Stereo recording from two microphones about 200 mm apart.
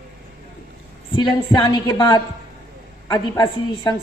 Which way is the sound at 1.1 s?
20° left (ahead or behind).